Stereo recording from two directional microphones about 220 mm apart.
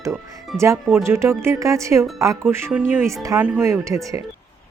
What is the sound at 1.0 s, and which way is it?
Speech, 10° right (ahead or behind).